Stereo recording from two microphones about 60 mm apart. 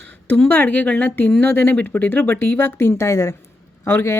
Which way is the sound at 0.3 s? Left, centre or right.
Left.